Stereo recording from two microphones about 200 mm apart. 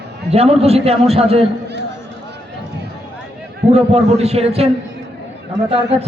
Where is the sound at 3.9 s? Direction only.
30° right (ahead or behind).